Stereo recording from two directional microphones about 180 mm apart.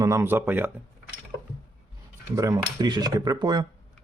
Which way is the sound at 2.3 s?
20° right (ahead or behind).